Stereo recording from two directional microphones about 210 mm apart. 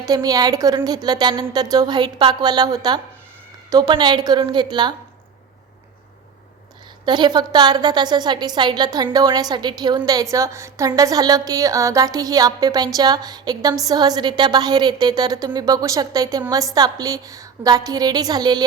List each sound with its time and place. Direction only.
0.0 s a woman's voice: 15° right (ahead or behind)
7.0 s a woman's voice: 20° right (ahead or behind)